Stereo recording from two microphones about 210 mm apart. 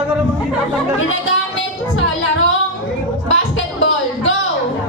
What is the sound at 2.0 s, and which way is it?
Speech, 65° left (ahead or behind).